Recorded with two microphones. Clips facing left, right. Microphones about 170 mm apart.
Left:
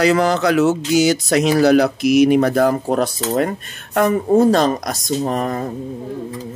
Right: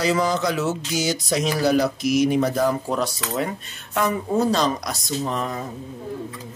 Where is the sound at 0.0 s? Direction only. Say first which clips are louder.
Left 6 dB; 70° left (ahead or behind); by 5.7 s 55° left (ahead or behind).